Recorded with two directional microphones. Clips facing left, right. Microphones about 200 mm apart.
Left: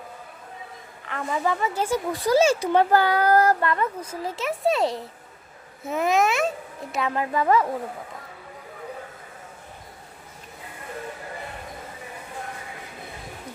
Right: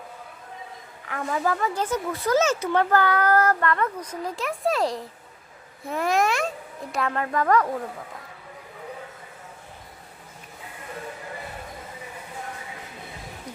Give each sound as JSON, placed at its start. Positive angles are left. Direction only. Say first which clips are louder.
{"t": 1.1, "sound": "speech", "louder": "even", "side_deg": 0}